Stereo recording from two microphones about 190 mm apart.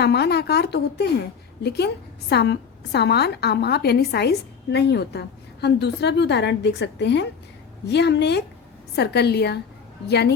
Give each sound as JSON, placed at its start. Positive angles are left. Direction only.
{"t": 0.0, "sound": "a woman's voice", "side_deg": 60}